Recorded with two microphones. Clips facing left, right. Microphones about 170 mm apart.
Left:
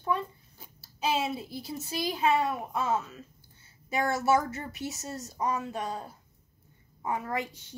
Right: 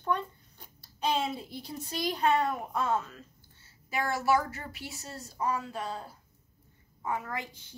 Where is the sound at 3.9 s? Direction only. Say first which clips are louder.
Left 2 dB; 25° left (ahead or behind).